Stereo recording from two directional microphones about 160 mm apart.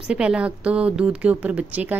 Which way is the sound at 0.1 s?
5° right (ahead or behind).